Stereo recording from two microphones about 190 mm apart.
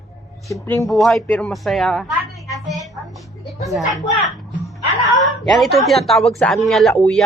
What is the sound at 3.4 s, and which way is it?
Music, centre (ahead or behind).